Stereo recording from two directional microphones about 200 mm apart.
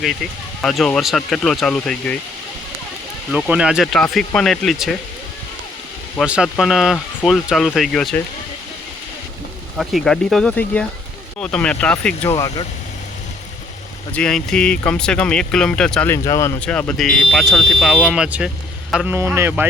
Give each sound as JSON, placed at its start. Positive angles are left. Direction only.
{"t": 0.6, "sound": "speech", "side_deg": 0}
{"t": 3.3, "sound": "speech", "side_deg": -5}
{"t": 6.1, "sound": "speech", "side_deg": -5}
{"t": 9.7, "sound": "speech", "side_deg": 0}
{"t": 12.3, "sound": "speech", "side_deg": 20}
{"t": 14.2, "sound": "speech", "side_deg": 5}